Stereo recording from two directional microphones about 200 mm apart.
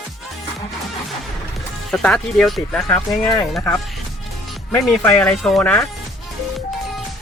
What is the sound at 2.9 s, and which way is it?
Speech, 20° left (ahead or behind).